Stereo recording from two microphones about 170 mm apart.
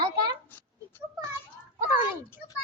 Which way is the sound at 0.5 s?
10° left (ahead or behind).